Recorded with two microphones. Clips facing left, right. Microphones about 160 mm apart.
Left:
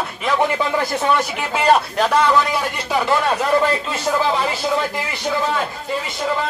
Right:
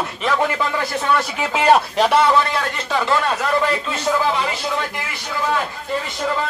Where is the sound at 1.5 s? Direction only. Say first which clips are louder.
Right 1 dB; 5° right (ahead or behind).